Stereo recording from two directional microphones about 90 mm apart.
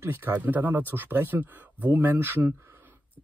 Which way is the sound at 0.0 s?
25° right (ahead or behind).